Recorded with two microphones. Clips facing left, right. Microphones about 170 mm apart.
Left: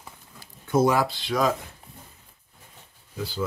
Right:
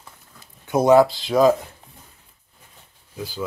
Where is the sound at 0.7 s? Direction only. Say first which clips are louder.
Right 7 dB; 20° right (ahead or behind).